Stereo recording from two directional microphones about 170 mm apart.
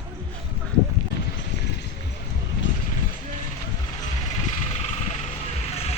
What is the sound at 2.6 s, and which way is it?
Vehicle, 90° left.